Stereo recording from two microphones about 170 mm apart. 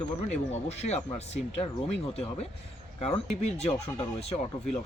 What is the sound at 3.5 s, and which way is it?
Speech, 40° left (ahead or behind).